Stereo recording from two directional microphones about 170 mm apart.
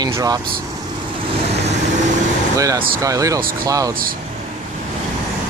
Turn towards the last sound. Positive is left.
turn(degrees=-20)  # may be behind; listen again after turning